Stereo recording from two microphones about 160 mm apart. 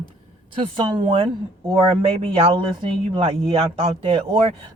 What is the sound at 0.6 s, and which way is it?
Speech, 30° right (ahead or behind).